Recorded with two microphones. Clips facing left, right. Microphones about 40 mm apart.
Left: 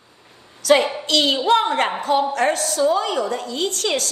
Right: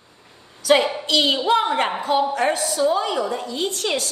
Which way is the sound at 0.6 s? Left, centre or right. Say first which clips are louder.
Left 1 dB; left.